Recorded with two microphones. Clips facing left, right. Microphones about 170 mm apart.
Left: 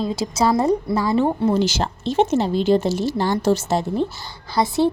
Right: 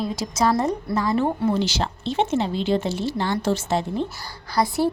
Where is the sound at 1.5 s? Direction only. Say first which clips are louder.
Left 4 dB; 45° left (ahead or behind).